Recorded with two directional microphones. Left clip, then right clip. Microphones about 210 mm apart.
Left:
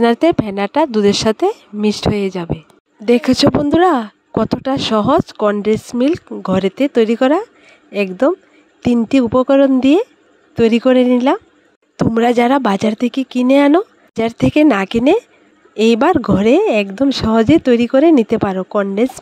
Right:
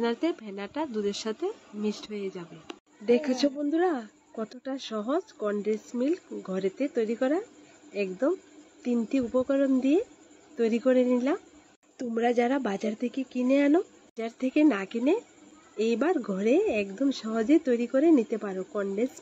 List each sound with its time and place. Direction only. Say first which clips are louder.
0.0 s speech: left 16 dB; 60° left (ahead or behind)